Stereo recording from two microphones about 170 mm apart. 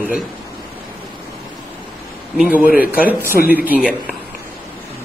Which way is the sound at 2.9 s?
10° right (ahead or behind).